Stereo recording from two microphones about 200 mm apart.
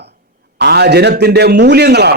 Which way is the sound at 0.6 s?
55° right (ahead or behind).